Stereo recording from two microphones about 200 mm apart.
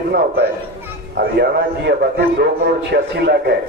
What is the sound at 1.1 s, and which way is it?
A man's voice, 55° right (ahead or behind).